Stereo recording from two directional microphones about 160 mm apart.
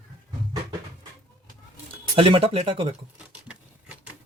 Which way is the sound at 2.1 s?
35° right (ahead or behind).